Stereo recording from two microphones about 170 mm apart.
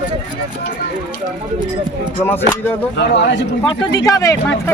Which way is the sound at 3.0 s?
90° left.